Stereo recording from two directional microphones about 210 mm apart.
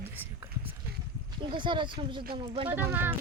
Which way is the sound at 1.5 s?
20° right (ahead or behind).